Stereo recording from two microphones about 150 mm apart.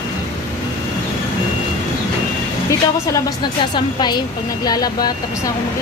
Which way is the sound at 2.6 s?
20° left (ahead or behind).